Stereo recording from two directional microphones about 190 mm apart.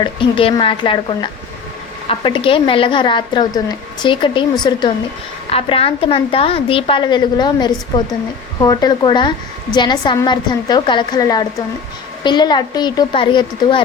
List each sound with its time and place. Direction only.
0.0 s a woman's voice: 25° left (ahead or behind)